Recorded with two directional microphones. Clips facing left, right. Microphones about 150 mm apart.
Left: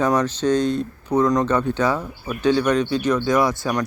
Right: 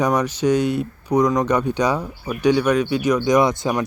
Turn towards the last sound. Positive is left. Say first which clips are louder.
# right 2 dB
turn(degrees=-20)  # may be behind; listen again after turning